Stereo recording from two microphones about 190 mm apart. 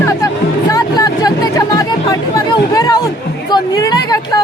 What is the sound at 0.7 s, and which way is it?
Chatter, 20° left (ahead or behind).